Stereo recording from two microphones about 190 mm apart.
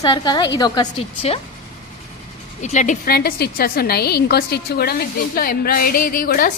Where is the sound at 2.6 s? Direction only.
40° left (ahead or behind).